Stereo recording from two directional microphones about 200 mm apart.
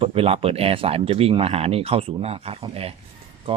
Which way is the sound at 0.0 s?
30° right (ahead or behind).